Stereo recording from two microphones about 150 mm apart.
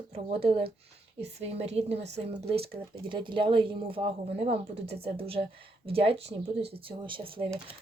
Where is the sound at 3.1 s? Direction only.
35° right (ahead or behind).